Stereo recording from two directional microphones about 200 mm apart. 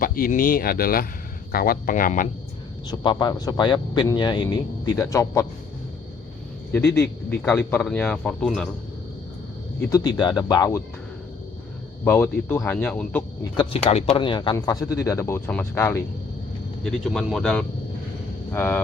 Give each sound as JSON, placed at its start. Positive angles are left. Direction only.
{"t": 0.0, "sound": "speech", "side_deg": 45}
{"t": 2.8, "sound": "speech", "side_deg": 25}
{"t": 6.7, "sound": "speech", "side_deg": 15}
{"t": 9.9, "sound": "speech", "side_deg": 20}
{"t": 12.0, "sound": "speech", "side_deg": 10}
{"t": 13.4, "sound": "speech", "side_deg": 25}
{"t": 16.8, "sound": "speech", "side_deg": 0}